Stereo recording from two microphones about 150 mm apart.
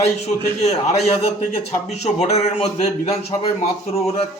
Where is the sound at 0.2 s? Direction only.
45° left (ahead or behind).